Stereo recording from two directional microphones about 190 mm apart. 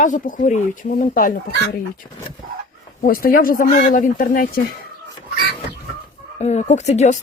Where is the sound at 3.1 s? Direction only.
50° left (ahead or behind).